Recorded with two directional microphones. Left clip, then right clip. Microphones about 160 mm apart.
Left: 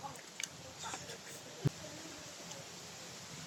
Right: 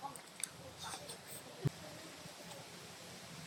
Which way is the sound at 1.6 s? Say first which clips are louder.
Left 4 dB; centre (ahead or behind).